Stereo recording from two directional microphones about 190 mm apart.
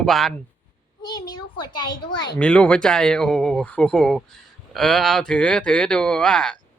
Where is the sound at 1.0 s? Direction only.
20° left (ahead or behind).